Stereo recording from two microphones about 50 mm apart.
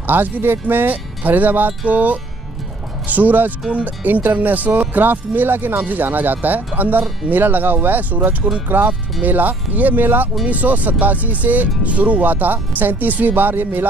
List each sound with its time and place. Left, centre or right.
0.0 s speech: right